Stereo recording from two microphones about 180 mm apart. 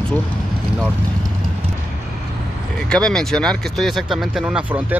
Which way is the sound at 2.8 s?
5° left (ahead or behind).